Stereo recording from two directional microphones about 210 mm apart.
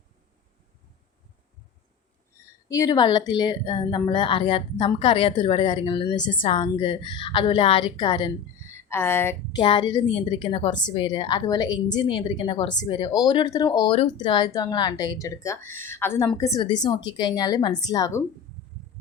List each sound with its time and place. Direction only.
2.6 s a woman's voice: 15° left (ahead or behind)
8.9 s speech: 10° left (ahead or behind)
9.6 s a woman's voice: 25° left (ahead or behind)